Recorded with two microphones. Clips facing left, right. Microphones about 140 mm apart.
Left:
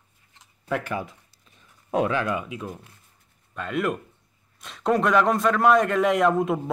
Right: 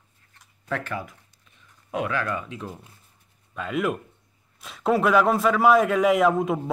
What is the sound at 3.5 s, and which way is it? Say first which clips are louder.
A man's voice: even; centre (ahead or behind).